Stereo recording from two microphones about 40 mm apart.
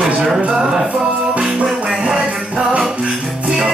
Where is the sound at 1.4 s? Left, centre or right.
Centre.